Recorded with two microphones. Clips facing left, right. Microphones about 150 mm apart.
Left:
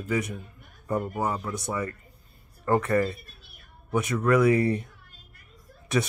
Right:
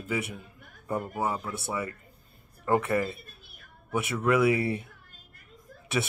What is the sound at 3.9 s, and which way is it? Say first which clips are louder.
Speech: left 3 dB; 5° right (ahead or behind).